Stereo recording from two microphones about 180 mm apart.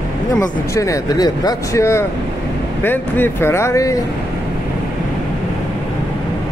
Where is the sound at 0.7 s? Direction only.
20° left (ahead or behind).